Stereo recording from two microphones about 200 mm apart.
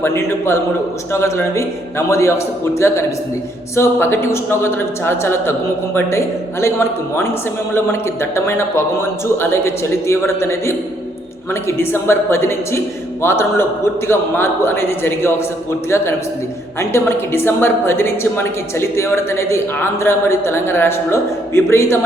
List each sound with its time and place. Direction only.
0.0 s a woman's voice: 10° left (ahead or behind)
16.8 s a woman's voice: 10° left (ahead or behind)